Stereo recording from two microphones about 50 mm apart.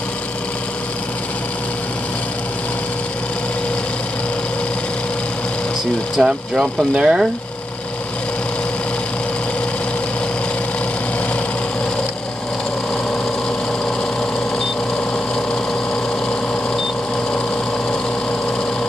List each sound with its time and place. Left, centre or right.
6.1 s speech: centre